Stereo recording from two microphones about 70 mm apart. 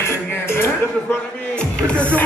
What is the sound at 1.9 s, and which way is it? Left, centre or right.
Music, centre.